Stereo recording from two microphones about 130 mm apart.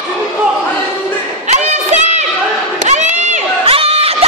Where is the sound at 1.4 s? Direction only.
60° right (ahead or behind).